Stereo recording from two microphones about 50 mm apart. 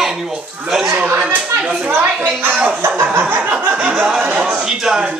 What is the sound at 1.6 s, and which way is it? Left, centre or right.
Speech, right.